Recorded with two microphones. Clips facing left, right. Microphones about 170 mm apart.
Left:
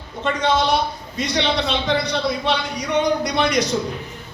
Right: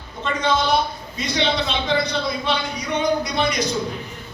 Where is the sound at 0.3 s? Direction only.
75° left (ahead or behind).